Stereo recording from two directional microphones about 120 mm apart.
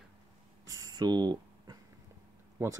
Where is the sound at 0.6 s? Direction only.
30° right (ahead or behind).